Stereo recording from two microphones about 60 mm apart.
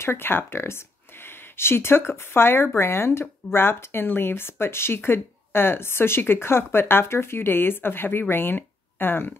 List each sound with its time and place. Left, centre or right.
0.0 s speech: left